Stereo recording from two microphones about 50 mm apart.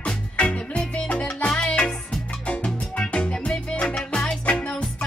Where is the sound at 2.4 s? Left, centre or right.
Left.